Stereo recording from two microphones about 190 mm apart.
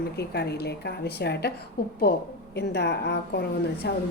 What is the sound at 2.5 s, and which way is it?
Speech, 60° left (ahead or behind).